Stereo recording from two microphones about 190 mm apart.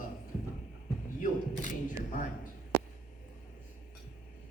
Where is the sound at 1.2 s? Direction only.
40° left (ahead or behind).